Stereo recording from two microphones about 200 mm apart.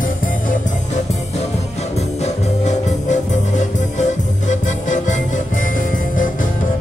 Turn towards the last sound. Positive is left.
turn(degrees=40)  # may be behind; listen again after turning